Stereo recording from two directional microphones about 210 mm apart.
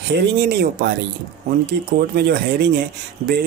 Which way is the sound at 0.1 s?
50° right (ahead or behind).